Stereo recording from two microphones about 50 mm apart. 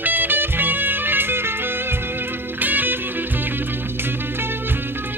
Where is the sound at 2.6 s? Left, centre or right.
Right.